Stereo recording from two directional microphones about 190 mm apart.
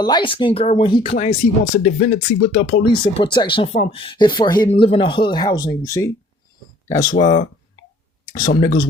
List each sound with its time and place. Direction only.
0.0 s speech: 25° left (ahead or behind)
1.1 s speech: 40° left (ahead or behind)
2.9 s speech: 25° left (ahead or behind)
7.1 s speech: 40° left (ahead or behind)